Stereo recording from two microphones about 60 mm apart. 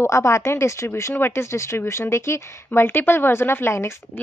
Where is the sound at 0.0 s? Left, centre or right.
Left.